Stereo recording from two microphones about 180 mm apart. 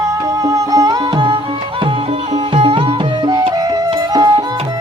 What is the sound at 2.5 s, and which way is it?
Music, 30° right (ahead or behind).